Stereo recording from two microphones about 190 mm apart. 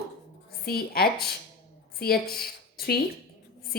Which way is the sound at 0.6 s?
55° left (ahead or behind).